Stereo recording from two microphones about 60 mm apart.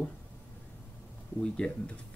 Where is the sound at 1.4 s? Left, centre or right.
Centre.